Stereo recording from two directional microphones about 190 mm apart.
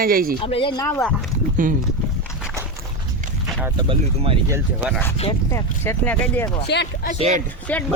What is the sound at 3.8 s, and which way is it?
Speech, 30° right (ahead or behind).